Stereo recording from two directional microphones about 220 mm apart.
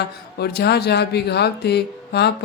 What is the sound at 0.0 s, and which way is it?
Speech, 45° left (ahead or behind).